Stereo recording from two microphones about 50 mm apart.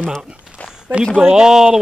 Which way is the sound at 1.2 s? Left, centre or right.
Centre.